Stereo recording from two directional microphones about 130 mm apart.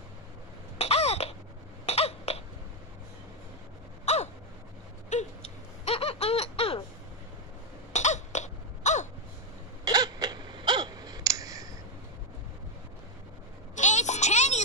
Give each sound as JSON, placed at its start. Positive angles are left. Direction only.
{"t": 0.7, "sound": "cough", "side_deg": 55}
{"t": 4.0, "sound": "gasp", "side_deg": 60}
{"t": 5.1, "sound": "baby laughter", "side_deg": 50}
{"t": 7.9, "sound": "throat clearing", "side_deg": 65}
{"t": 9.8, "sound": "a sound", "side_deg": -30}
{"t": 13.7, "sound": "music", "side_deg": 65}